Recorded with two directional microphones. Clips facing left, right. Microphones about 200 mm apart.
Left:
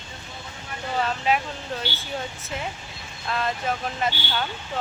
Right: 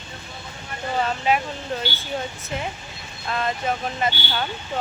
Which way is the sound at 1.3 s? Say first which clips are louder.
Right 2 dB; centre (ahead or behind).